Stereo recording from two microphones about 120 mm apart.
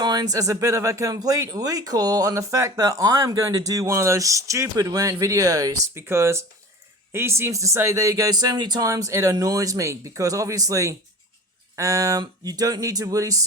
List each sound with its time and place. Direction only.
0.0 s speech: 35° right (ahead or behind)